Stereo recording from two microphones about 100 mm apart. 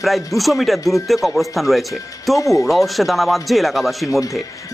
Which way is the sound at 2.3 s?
35° left (ahead or behind).